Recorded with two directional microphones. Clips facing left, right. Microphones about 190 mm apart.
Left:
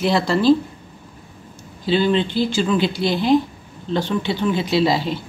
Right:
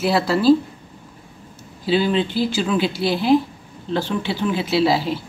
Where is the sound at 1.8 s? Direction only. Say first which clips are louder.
Left 1 dB; 5° right (ahead or behind).